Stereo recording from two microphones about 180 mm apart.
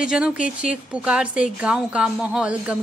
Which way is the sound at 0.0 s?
5° right (ahead or behind).